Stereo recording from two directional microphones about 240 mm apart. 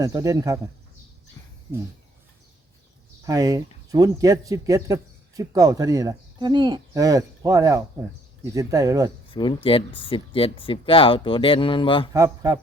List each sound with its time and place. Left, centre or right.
0.0 s speech: centre
3.2 s speech: centre
9.3 s speech: left
12.1 s speech: centre